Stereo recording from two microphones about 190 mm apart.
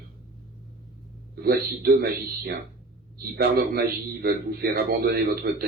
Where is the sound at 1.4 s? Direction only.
55° right (ahead or behind).